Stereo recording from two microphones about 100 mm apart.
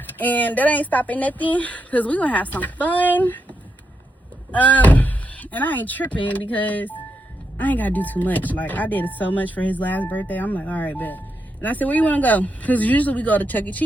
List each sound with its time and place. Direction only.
0.1 s speech: 15° left (ahead or behind)
4.5 s speech: 15° left (ahead or behind)